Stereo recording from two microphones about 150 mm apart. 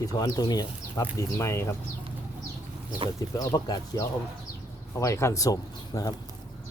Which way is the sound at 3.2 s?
25° left (ahead or behind).